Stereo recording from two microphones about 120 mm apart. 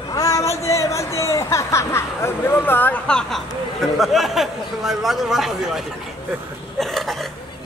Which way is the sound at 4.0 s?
Centre (ahead or behind).